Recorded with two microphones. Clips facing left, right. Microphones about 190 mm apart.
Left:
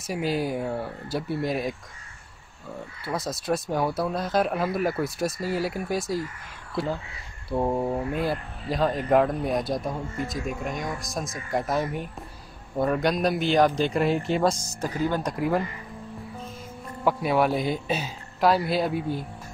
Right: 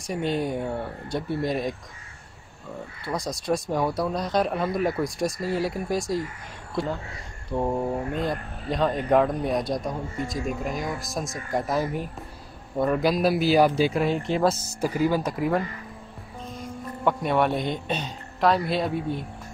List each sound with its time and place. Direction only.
0.0 s speech: 5° left (ahead or behind)
3.1 s speech: 5° left (ahead or behind)
7.4 s speech: 10° left (ahead or behind)
17.0 s speech: 5° left (ahead or behind)